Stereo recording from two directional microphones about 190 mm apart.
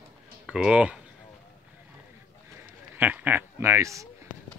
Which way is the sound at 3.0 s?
10° right (ahead or behind).